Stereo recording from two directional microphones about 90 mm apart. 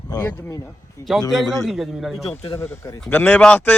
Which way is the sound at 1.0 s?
30° left (ahead or behind).